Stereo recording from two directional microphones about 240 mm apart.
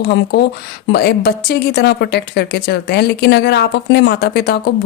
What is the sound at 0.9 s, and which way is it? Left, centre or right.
A woman's voice, left.